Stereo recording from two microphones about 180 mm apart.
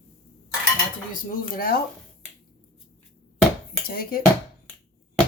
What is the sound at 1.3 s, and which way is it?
Speech, 55° left (ahead or behind).